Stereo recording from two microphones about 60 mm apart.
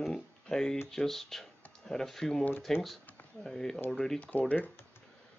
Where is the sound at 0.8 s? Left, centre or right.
Centre.